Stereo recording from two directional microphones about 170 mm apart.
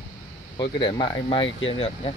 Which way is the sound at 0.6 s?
25° left (ahead or behind).